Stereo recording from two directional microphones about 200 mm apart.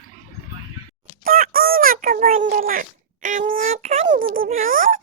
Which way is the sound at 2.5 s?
45° right (ahead or behind).